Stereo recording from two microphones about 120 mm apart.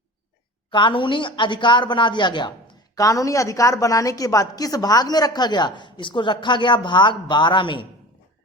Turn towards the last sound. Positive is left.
turn(degrees=40)  # may be behind; listen again after turning